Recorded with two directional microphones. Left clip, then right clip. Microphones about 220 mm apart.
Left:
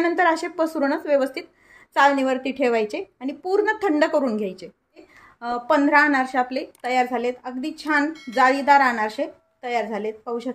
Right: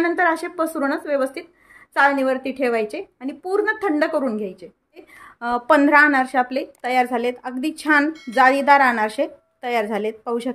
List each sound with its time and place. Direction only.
0.0 s a woman's voice: centre (ahead or behind)
5.4 s speech: 25° right (ahead or behind)
8.1 s a woman's voice: centre (ahead or behind)
8.4 s speech: 20° right (ahead or behind)